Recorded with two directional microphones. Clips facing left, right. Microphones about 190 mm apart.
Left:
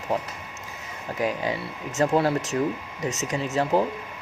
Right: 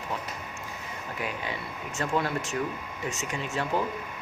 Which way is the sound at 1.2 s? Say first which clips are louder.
Left 9 dB; 40° left (ahead or behind).